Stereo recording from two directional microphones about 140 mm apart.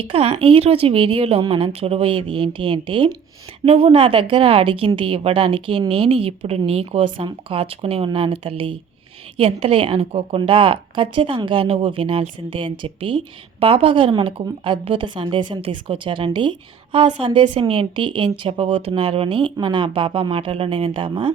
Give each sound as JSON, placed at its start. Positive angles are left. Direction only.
{"t": 0.1, "sound": "a woman's voice", "side_deg": -40}